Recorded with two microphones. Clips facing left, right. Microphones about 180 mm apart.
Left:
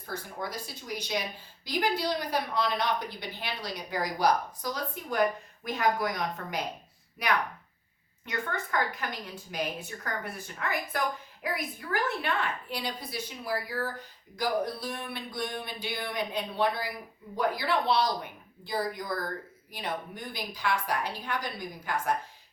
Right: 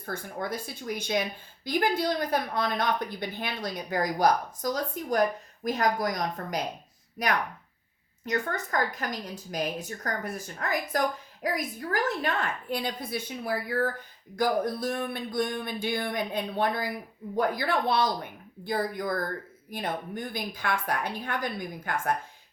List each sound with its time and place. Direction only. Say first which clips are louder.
0.0 s a woman's voice: right 3 dB; 55° right (ahead or behind)